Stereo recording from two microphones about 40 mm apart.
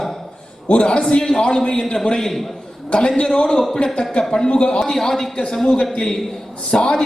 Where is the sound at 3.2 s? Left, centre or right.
Left.